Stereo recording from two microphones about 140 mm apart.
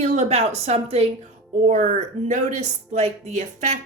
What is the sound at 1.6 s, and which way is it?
Speech, 60° right (ahead or behind).